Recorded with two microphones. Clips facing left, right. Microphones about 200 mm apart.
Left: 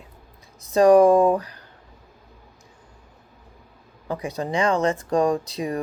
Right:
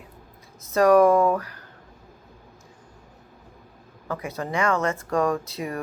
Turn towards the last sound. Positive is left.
turn(degrees=15)  # may be behind; listen again after turning